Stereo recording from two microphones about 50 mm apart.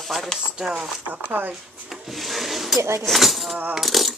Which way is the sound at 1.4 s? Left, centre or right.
Right.